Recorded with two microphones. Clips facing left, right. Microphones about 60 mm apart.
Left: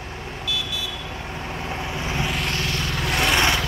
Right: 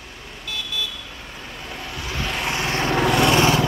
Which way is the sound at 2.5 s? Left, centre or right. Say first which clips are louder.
Right 4 dB; right.